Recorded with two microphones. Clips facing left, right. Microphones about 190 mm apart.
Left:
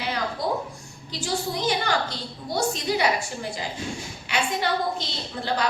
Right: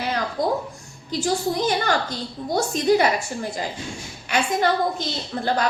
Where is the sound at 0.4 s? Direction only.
45° right (ahead or behind).